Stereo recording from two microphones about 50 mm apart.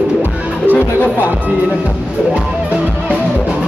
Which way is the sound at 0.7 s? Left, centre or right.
Left.